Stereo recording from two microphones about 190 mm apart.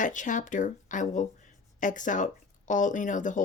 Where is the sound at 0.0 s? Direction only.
40° left (ahead or behind).